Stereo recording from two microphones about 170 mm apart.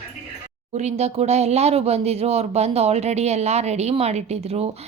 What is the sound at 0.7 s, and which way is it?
Speech, 40° right (ahead or behind).